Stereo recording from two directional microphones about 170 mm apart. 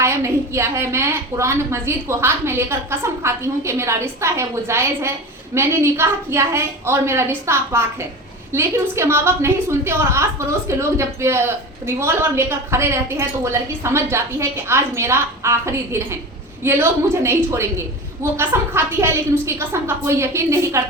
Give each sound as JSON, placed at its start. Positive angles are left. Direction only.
{"t": 0.0, "sound": "a woman's voice", "side_deg": -15}